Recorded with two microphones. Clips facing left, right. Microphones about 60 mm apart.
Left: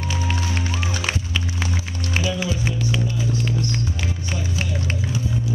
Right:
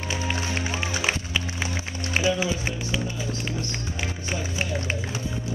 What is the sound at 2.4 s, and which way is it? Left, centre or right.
Music, centre.